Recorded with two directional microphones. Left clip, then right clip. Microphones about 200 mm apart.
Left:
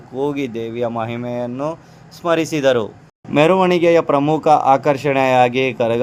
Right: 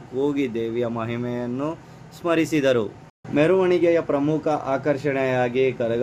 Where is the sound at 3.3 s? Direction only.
50° left (ahead or behind).